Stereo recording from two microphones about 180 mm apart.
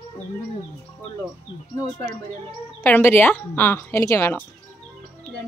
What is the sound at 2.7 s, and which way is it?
Speech, 10° left (ahead or behind).